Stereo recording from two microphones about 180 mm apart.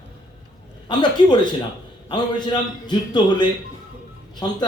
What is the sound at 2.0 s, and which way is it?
Speech, 25° left (ahead or behind).